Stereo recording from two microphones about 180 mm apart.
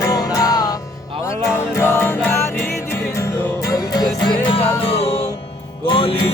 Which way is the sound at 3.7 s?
20° left (ahead or behind).